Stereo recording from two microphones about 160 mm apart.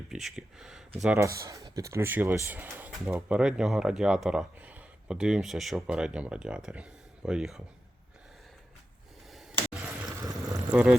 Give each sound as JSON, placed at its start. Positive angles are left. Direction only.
{"t": 0.1, "sound": "speech", "side_deg": 0}
{"t": 1.2, "sound": "speech", "side_deg": -20}
{"t": 10.1, "sound": "a sound", "side_deg": -20}
{"t": 10.7, "sound": "speech", "side_deg": -5}